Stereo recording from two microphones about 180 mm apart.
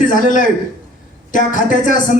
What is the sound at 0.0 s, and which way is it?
A man's voice, 45° left (ahead or behind).